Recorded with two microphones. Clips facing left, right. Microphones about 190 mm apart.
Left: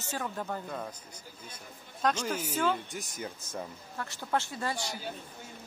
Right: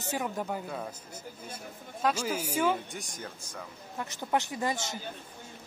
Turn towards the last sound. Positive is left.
turn(degrees=-20)  # may be behind; listen again after turning